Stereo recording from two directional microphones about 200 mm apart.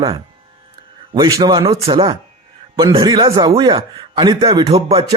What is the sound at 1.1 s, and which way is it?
Speech, 20° right (ahead or behind).